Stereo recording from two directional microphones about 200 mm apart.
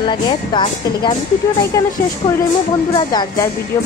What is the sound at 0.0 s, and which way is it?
A woman's voice, 25° left (ahead or behind).